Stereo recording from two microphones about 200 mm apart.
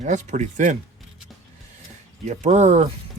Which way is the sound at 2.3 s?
35° right (ahead or behind).